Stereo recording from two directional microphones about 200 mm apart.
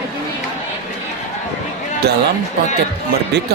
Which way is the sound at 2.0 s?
55° right (ahead or behind).